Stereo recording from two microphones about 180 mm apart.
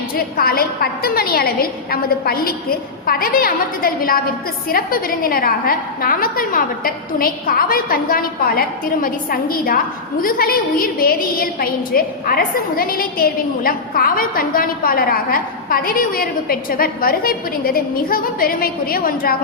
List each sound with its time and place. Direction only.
0.1 s a woman's voice: 55° left (ahead or behind)